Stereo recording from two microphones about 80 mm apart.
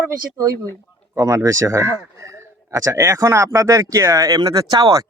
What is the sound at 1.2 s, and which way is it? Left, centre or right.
A man's voice, right.